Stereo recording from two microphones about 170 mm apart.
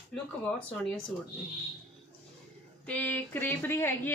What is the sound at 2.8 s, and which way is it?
A woman's voice, 10° left (ahead or behind).